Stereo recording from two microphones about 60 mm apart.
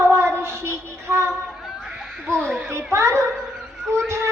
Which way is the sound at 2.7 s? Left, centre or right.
Right.